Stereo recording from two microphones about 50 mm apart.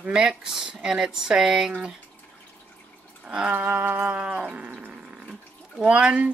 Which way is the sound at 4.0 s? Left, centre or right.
Right.